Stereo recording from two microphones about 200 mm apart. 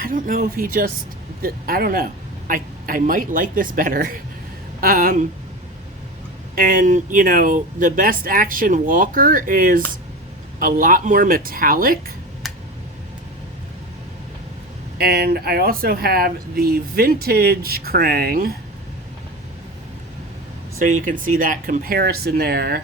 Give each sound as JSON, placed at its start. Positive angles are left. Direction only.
{"t": 0.0, "sound": "speech", "side_deg": -45}
{"t": 6.6, "sound": "speech", "side_deg": -45}
{"t": 12.4, "sound": "tick", "side_deg": 0}
{"t": 14.9, "sound": "speech", "side_deg": -50}
{"t": 20.7, "sound": "speech", "side_deg": -40}